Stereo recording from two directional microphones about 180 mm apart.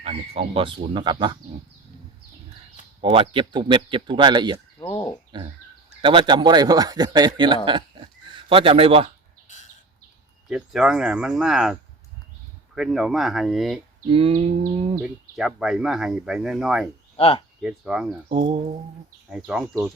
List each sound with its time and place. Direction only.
0.0 s speech: 35° right (ahead or behind)
3.0 s speech: 30° right (ahead or behind)
4.8 s frog: 20° left (ahead or behind)
5.3 s a man's voice: 25° right (ahead or behind)
10.5 s speech: 5° right (ahead or behind)
14.1 s a sound: 30° right (ahead or behind)
15.0 s speech: 5° right (ahead or behind)
17.2 s speech: 30° left (ahead or behind)
17.6 s speech: 5° right (ahead or behind)
18.3 s speech: 30° right (ahead or behind)